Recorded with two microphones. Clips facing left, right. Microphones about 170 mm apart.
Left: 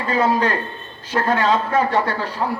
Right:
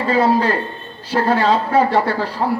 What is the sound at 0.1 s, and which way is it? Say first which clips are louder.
A man's voice: right 3 dB; 35° right (ahead or behind).